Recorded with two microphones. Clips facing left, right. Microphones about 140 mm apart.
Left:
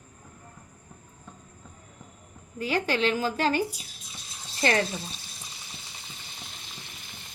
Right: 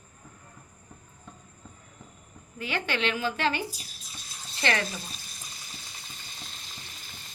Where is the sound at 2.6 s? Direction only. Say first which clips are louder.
Left 4 dB; 40° left (ahead or behind).